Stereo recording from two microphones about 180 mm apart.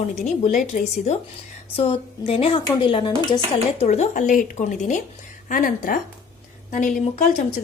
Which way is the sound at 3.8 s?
40° left (ahead or behind).